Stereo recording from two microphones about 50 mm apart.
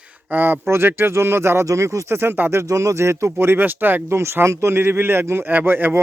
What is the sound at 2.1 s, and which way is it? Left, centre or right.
Speech, right.